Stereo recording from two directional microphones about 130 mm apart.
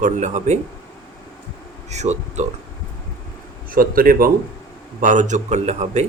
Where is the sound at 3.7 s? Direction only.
90° right.